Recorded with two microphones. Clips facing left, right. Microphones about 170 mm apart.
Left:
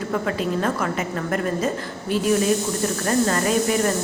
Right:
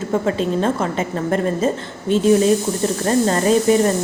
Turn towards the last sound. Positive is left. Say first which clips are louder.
# right 6 dB
turn(degrees=-25)  # may be behind; listen again after turning